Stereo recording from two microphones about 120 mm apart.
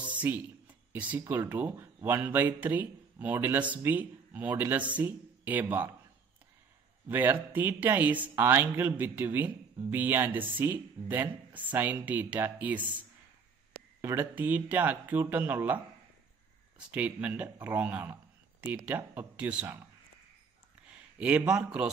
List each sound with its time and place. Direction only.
0.0 s a sound: 15° right (ahead or behind)
1.2 s speech: 15° right (ahead or behind)
7.1 s speech: 15° right (ahead or behind)
14.0 s speech: 20° right (ahead or behind)
20.8 s speech: 10° right (ahead or behind)